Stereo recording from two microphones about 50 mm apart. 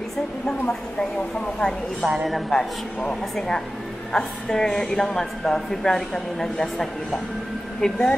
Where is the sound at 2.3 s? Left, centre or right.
Centre.